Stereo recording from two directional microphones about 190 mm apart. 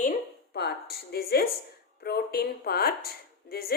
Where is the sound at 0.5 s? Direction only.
55° left (ahead or behind).